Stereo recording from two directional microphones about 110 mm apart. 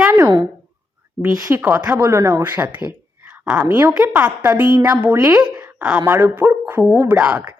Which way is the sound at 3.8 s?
15° right (ahead or behind).